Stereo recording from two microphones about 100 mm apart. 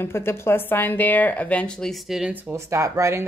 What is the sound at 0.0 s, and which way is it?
Speech, 25° left (ahead or behind).